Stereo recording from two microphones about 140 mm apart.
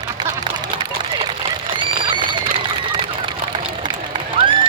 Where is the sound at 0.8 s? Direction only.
35° right (ahead or behind).